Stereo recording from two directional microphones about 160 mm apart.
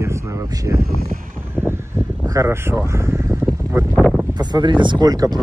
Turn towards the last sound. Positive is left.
turn(degrees=-25)  # may be behind; listen again after turning